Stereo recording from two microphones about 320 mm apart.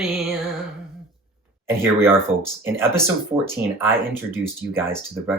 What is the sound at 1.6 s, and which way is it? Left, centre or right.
Speech, centre.